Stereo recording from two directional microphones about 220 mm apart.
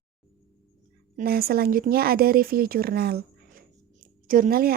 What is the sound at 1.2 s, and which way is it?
Speech, 45° right (ahead or behind).